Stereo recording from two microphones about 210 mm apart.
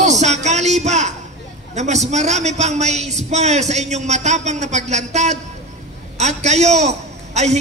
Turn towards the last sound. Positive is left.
turn(degrees=-30)  # may be behind; listen again after turning